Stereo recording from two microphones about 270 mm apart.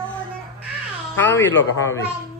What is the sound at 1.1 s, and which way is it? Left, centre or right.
Speech, centre.